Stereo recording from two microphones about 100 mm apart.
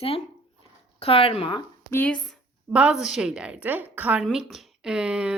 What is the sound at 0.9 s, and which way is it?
Speech, 70° left (ahead or behind).